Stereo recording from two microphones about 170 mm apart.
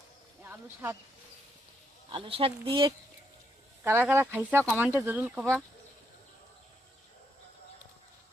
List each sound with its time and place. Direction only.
0.4 s speech: 10° right (ahead or behind)
2.0 s speech: 30° right (ahead or behind)
4.0 s speech: 10° right (ahead or behind)